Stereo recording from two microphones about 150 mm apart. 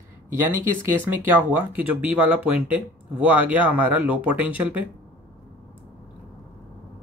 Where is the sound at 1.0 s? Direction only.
10° right (ahead or behind).